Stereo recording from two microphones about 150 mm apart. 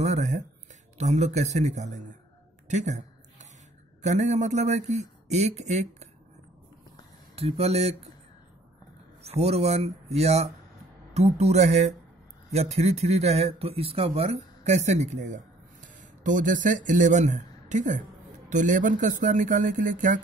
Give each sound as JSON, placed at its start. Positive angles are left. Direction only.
{"t": 0.0, "sound": "a sound", "side_deg": -50}
{"t": 0.9, "sound": "a man's voice", "side_deg": -50}
{"t": 2.7, "sound": "a sound", "side_deg": -50}
{"t": 4.0, "sound": "a man's voice", "side_deg": -50}
{"t": 7.3, "sound": "a man's voice", "side_deg": -40}
{"t": 9.2, "sound": "a man's voice", "side_deg": -45}